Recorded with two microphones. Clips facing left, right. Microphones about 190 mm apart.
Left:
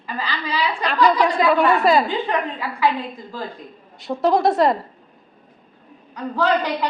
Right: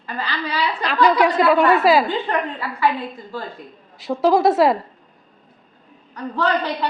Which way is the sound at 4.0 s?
Centre (ahead or behind).